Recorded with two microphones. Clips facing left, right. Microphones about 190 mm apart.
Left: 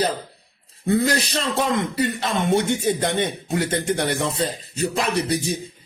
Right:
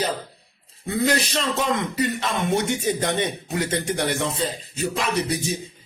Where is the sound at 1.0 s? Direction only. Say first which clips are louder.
Even; 35° left (ahead or behind).